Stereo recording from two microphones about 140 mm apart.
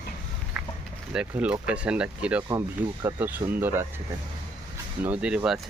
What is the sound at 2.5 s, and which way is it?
Speech, 25° right (ahead or behind).